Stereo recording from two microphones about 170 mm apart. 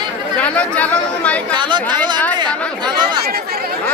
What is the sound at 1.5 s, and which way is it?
Speech, 25° right (ahead or behind).